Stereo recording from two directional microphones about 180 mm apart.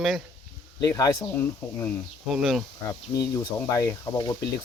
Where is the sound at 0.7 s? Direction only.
20° left (ahead or behind).